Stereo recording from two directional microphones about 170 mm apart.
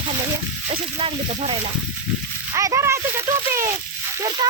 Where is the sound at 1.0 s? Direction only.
30° right (ahead or behind).